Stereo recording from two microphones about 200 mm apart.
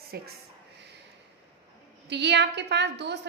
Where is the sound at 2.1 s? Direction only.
60° right (ahead or behind).